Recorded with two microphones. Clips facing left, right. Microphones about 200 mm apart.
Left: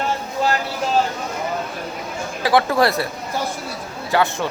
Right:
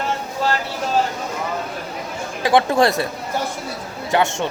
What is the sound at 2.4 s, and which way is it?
Speech, 25° right (ahead or behind).